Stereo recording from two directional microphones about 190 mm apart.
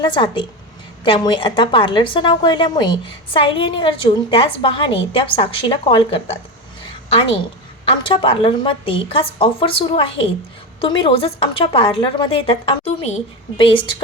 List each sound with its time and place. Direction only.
0.0 s a woman's voice: 25° left (ahead or behind)
7.9 s a woman's voice: 30° left (ahead or behind)